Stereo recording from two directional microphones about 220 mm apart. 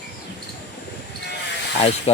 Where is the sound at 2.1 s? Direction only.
30° left (ahead or behind).